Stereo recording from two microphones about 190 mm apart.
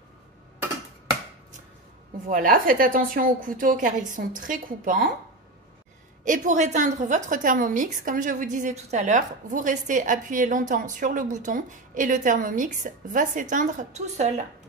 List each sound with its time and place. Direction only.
2.2 s a woman's voice: 45° right (ahead or behind)
6.2 s a woman's voice: 40° right (ahead or behind)